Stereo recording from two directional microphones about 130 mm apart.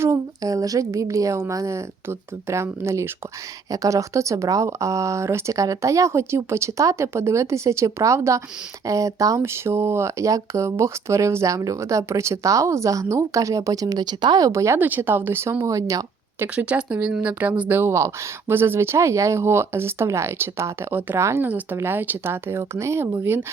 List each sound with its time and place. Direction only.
0.0 s speech: 25° right (ahead or behind)
16.6 s speech: 10° right (ahead or behind)